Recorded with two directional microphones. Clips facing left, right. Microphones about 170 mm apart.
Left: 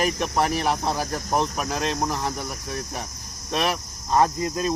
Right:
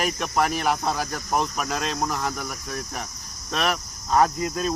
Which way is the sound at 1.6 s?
25° left (ahead or behind).